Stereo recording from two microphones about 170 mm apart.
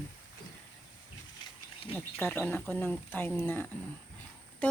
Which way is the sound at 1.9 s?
5° left (ahead or behind).